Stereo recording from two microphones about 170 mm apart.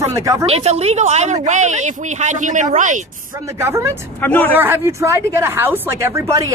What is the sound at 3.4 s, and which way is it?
Speech, 15° right (ahead or behind).